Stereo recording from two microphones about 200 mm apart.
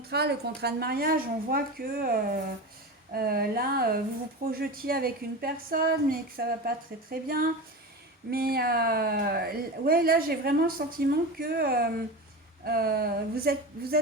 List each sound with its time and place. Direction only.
0.0 s speech: 55° right (ahead or behind)